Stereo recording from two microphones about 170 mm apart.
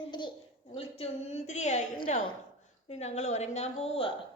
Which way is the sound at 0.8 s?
35° left (ahead or behind).